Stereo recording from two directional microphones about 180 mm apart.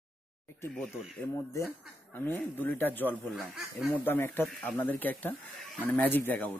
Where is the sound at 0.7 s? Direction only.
Centre (ahead or behind).